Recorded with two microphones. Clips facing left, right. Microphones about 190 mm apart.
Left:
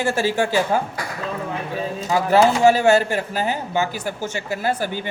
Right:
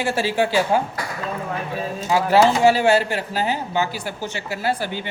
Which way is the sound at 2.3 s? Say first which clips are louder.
Left 1 dB; 45° left (ahead or behind).